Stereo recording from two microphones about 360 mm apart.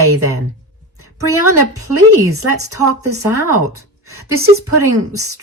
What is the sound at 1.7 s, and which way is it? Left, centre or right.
Speech, right.